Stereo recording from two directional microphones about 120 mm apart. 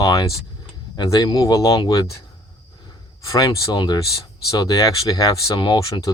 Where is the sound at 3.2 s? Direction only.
30° left (ahead or behind).